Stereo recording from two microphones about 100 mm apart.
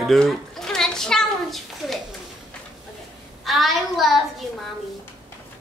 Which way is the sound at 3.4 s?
Centre (ahead or behind).